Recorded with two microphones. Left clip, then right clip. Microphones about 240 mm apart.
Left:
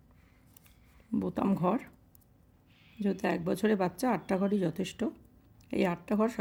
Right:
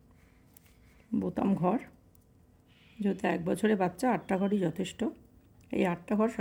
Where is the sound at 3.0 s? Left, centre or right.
Centre.